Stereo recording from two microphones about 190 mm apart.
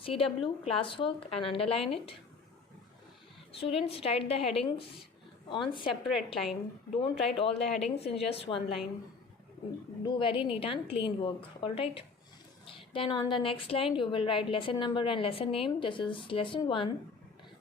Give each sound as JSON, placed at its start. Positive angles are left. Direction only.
{"t": 0.0, "sound": "a woman's voice", "side_deg": 30}
{"t": 3.5, "sound": "a woman's voice", "side_deg": 30}
{"t": 5.9, "sound": "a woman's voice", "side_deg": 0}
{"t": 7.0, "sound": "speech", "side_deg": 30}
{"t": 10.1, "sound": "a woman's voice", "side_deg": 25}